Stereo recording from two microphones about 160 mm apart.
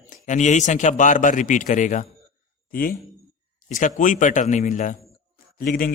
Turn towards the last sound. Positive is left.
turn(degrees=65)  # may be behind; listen again after turning